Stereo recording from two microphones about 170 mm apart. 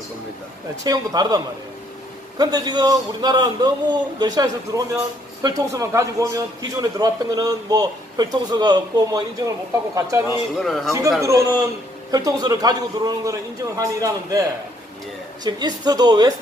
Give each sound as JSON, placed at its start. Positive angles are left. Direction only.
{"t": 0.8, "sound": "a man's voice", "side_deg": -25}
{"t": 10.6, "sound": "speech", "side_deg": 0}
{"t": 11.1, "sound": "a man's voice", "side_deg": -15}
{"t": 15.4, "sound": "a man's voice", "side_deg": -25}